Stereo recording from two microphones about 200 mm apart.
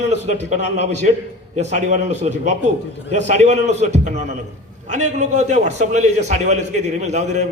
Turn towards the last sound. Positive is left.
turn(degrees=-35)  # may be behind; listen again after turning